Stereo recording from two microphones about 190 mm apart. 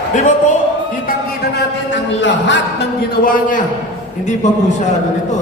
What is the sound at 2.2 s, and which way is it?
Speech, 70° left (ahead or behind).